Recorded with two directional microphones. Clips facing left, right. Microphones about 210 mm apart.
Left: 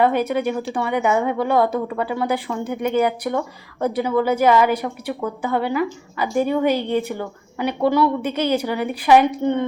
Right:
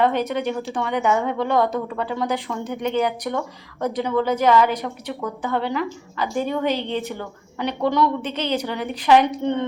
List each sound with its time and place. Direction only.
0.0 s speech: 10° left (ahead or behind)